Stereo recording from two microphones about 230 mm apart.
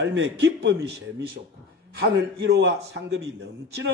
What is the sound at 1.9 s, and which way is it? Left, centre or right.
A man's voice, right.